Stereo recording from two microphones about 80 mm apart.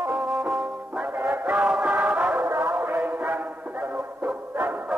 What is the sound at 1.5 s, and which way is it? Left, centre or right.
Music, centre.